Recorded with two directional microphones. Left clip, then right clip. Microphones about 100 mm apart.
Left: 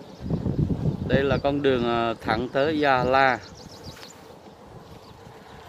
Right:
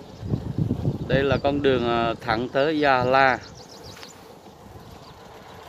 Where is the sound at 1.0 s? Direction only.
10° right (ahead or behind).